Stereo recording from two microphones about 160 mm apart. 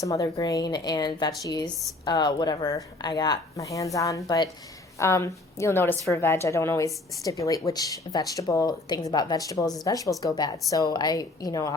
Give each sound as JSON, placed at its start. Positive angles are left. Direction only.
{"t": 0.0, "sound": "a woman's voice", "side_deg": 20}